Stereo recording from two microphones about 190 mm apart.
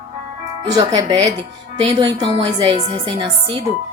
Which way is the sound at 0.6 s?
20° right (ahead or behind).